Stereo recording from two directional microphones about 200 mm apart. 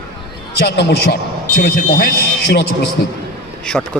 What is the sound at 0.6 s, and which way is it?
A man's voice, 55° left (ahead or behind).